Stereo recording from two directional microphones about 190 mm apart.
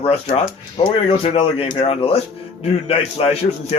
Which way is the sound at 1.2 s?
30° left (ahead or behind).